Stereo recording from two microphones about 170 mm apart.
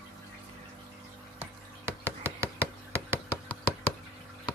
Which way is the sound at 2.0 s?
15° right (ahead or behind).